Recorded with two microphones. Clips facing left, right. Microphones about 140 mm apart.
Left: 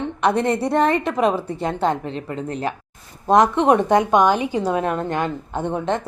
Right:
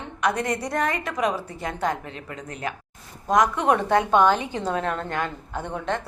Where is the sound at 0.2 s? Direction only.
30° left (ahead or behind).